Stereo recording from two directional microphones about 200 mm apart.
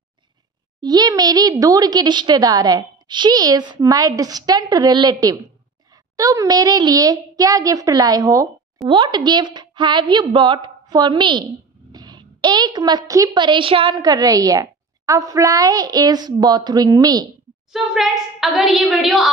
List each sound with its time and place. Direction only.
0.7 s a woman's voice: 20° right (ahead or behind)
17.7 s a woman's voice: centre (ahead or behind)